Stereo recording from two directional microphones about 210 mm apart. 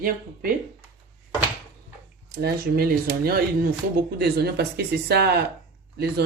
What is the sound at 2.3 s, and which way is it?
Speech, 50° right (ahead or behind).